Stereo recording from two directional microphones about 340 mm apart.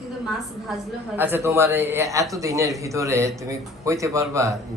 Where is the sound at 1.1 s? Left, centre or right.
Centre.